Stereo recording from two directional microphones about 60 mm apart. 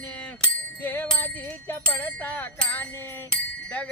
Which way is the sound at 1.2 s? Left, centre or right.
Left.